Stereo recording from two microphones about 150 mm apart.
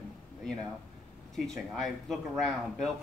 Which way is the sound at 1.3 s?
Centre (ahead or behind).